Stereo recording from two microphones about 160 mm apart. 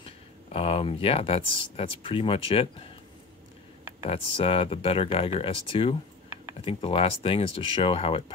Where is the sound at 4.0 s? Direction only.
35° left (ahead or behind).